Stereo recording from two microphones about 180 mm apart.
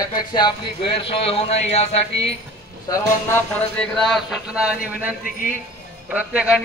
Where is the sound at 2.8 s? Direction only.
20° left (ahead or behind).